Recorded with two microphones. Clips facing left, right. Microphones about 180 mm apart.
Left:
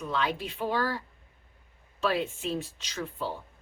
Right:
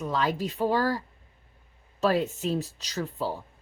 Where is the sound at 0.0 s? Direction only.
40° right (ahead or behind).